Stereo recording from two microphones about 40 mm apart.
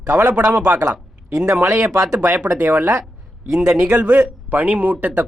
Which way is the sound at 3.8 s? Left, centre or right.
Right.